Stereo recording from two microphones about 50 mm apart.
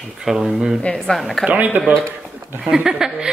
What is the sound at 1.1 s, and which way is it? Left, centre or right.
Speech, centre.